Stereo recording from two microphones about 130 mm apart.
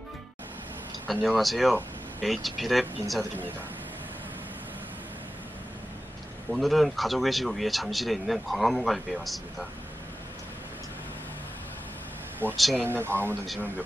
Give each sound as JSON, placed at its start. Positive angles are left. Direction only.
{"t": 1.2, "sound": "speech", "side_deg": 0}
{"t": 6.5, "sound": "speech", "side_deg": 0}
{"t": 12.4, "sound": "speech", "side_deg": -15}